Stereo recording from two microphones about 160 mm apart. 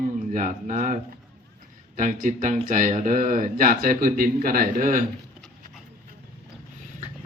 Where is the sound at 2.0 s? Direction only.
55° right (ahead or behind).